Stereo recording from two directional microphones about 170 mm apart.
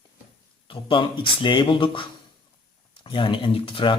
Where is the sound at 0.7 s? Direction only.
30° left (ahead or behind).